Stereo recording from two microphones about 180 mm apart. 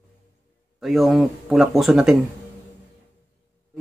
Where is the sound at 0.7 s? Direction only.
Centre (ahead or behind).